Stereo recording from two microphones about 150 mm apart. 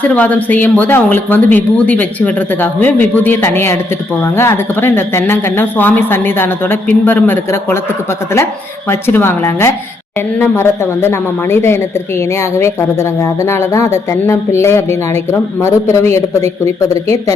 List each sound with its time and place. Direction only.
0.0 s speech: 10° left (ahead or behind)
8.9 s speech: 15° left (ahead or behind)